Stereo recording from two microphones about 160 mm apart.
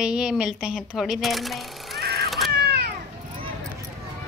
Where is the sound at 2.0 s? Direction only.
85° right.